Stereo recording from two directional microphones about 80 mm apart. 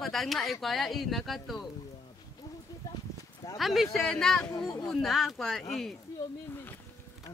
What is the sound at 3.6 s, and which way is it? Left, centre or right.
Speech, centre.